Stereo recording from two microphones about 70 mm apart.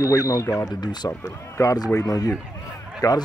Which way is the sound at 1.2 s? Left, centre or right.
Left.